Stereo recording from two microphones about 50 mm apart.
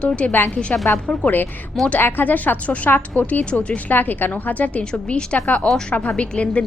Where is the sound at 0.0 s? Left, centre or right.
Left.